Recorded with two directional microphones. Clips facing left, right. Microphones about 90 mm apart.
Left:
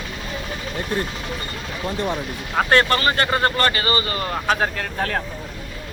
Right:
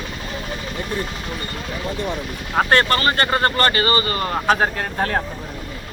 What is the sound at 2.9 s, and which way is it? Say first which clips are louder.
Speech: right 1 dB; 45° right (ahead or behind).